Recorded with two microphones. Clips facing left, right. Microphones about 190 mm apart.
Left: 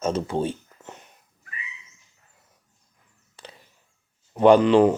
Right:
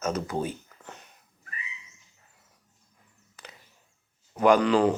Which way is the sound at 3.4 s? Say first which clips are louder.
Left 4 dB; 30° left (ahead or behind).